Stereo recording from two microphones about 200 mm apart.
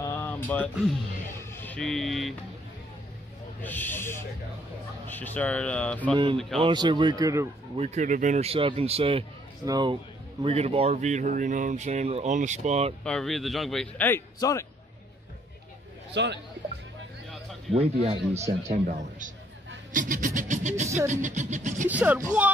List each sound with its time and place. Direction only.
0.0 s a sound: 15° left (ahead or behind)
1.5 s speech: 10° left (ahead or behind)
3.6 s speech: 10° left (ahead or behind)
6.6 s a man's voice: 20° right (ahead or behind)
7.7 s a man's voice: 35° right (ahead or behind)
13.0 s a man's voice: 5° left (ahead or behind)
16.1 s a man's voice: 60° right (ahead or behind)
17.7 s speech: 30° right (ahead or behind)
21.8 s speech: 10° right (ahead or behind)